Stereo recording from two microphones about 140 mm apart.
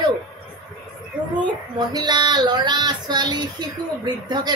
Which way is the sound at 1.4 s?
30° right (ahead or behind).